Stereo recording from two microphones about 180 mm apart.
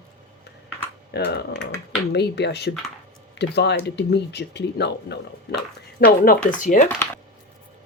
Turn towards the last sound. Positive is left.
turn(degrees=45)  # may be behind; listen again after turning